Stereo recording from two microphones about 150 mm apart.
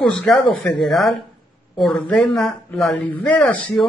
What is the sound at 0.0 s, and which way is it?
Speech, 5° left (ahead or behind).